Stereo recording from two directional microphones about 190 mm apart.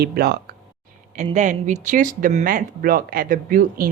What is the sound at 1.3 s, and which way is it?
Speech, 40° right (ahead or behind).